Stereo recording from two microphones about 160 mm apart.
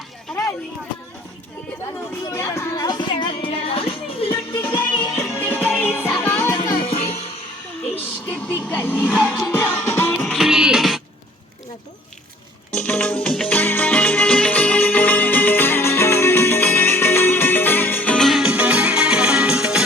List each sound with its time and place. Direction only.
2.3 s music: 15° left (ahead or behind); by 4.4 s 35° left (ahead or behind)
4.5 s music: 15° left (ahead or behind)
6.8 s music: 40° left (ahead or behind)
7.9 s music: 10° left (ahead or behind)
12.7 s music: 5° left (ahead or behind)